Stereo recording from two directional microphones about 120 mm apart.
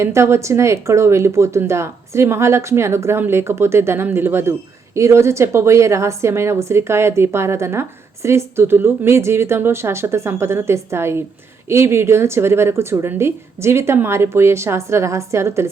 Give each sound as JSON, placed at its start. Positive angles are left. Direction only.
{"t": 0.0, "sound": "a woman's voice", "side_deg": -20}